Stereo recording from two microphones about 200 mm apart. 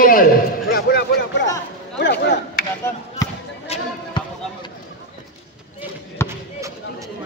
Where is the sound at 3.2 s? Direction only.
20° left (ahead or behind).